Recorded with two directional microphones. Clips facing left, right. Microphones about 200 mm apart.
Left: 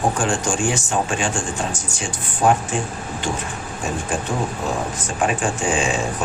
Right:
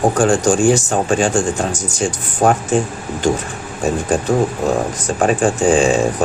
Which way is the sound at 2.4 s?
45° right (ahead or behind).